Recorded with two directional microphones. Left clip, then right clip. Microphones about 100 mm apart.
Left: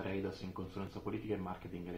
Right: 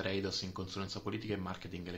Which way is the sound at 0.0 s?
30° right (ahead or behind).